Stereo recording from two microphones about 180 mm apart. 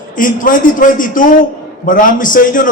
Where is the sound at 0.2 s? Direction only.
50° left (ahead or behind).